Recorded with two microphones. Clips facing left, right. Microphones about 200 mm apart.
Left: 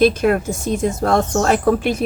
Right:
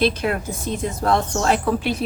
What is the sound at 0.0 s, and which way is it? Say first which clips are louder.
A woman's voice: left 6 dB; 50° left (ahead or behind).